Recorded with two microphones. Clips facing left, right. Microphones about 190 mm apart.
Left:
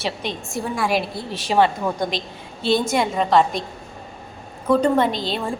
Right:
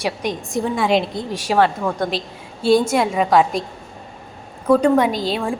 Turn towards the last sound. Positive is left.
turn(degrees=0)  # may be behind; listen again after turning